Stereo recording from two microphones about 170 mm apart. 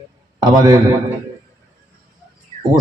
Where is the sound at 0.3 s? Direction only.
25° right (ahead or behind).